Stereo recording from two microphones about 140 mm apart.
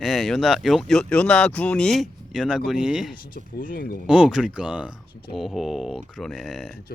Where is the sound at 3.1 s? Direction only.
85° left.